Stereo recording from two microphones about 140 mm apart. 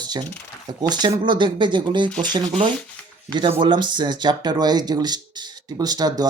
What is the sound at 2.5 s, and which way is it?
Speech, 40° right (ahead or behind).